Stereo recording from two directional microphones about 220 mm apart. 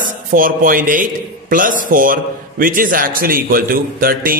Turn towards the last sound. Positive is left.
turn(degrees=-40)  # may be behind; listen again after turning